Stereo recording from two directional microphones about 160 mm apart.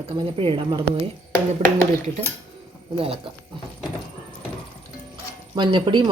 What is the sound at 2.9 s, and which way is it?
Speech, 35° right (ahead or behind).